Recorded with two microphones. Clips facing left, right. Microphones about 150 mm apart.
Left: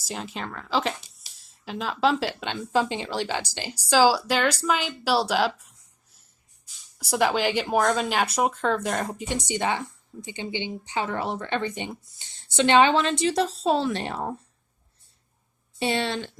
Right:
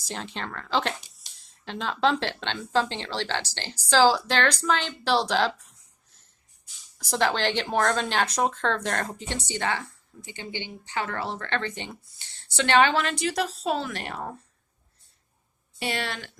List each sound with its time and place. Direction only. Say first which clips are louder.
0.0 s speech: left 1 dB; 5° left (ahead or behind)
7.0 s speech: left 2 dB; 10° left (ahead or behind)
15.8 s speech: left 5 dB; 25° left (ahead or behind)